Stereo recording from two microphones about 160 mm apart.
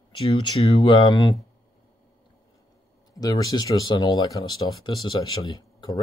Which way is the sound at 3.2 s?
25° left (ahead or behind).